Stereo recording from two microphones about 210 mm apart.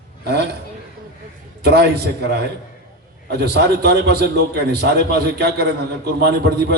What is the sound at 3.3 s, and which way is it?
Speech, 50° right (ahead or behind).